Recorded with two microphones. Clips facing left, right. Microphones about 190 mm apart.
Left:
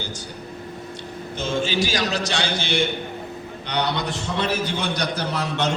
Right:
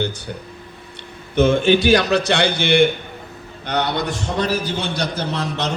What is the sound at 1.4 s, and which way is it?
A man's voice, 60° right (ahead or behind).